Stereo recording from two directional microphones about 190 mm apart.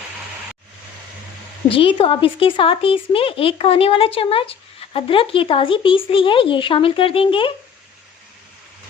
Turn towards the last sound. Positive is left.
turn(degrees=30)  # may be behind; listen again after turning